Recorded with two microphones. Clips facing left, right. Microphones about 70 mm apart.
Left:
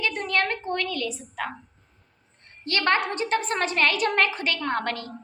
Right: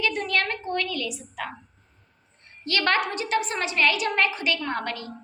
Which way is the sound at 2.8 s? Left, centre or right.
Left.